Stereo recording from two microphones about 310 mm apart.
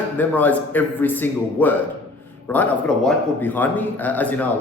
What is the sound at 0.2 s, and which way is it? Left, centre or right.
A man's voice, centre.